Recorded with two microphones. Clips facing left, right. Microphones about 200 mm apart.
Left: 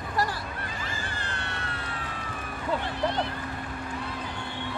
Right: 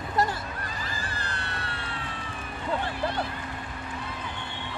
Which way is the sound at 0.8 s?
35° right (ahead or behind).